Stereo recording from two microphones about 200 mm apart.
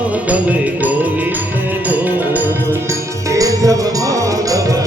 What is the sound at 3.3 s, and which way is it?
Music, 15° right (ahead or behind).